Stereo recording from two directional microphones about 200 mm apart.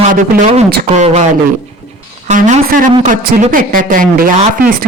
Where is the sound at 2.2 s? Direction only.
35° right (ahead or behind).